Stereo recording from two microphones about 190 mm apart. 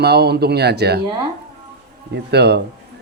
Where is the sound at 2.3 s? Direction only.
60° right (ahead or behind).